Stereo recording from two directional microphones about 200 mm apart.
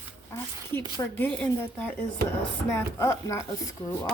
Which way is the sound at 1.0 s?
10° left (ahead or behind).